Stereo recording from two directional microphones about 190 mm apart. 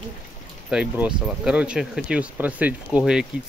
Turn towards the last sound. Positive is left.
turn(degrees=-5)  # may be behind; listen again after turning